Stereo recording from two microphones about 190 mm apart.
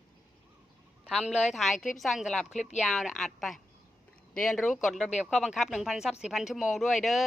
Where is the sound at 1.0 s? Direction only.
5° right (ahead or behind).